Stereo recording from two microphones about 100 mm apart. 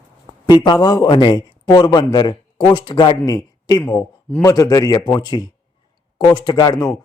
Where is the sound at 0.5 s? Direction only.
45° left (ahead or behind).